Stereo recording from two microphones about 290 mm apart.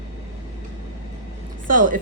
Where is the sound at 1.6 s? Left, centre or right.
Right.